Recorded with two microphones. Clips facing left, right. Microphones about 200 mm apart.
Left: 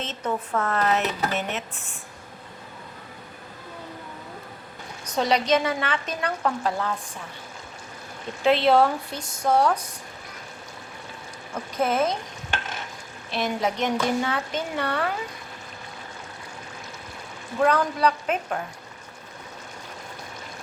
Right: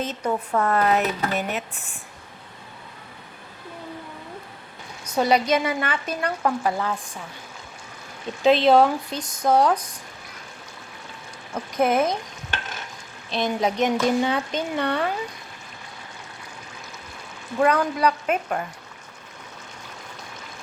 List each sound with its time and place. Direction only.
0.0 s a woman's voice: 10° right (ahead or behind)
5.0 s a woman's voice: 10° right (ahead or behind)
8.4 s a woman's voice: 15° right (ahead or behind)
11.8 s a woman's voice: 15° right (ahead or behind)
13.3 s speech: 20° right (ahead or behind)
17.6 s a woman's voice: 10° right (ahead or behind)